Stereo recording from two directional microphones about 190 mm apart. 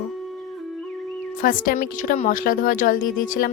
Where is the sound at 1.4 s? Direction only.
45° left (ahead or behind).